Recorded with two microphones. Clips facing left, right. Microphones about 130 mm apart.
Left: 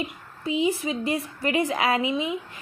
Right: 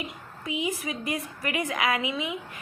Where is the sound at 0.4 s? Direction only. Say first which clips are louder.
Left 6 dB; 30° left (ahead or behind).